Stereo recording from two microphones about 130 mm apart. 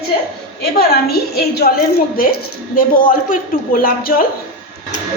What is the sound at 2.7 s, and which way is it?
A woman's voice, 90° left.